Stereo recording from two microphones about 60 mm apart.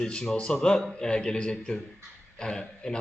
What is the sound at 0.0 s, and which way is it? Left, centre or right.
A man's voice, centre.